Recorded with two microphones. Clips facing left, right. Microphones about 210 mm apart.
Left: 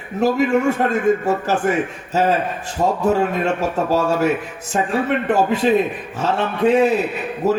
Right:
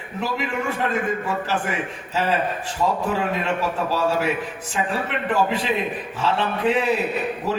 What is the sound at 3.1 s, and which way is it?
A man's voice, 45° left (ahead or behind).